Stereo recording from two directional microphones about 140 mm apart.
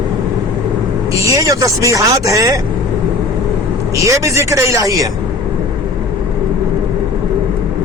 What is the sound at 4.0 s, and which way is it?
Speech, 20° right (ahead or behind).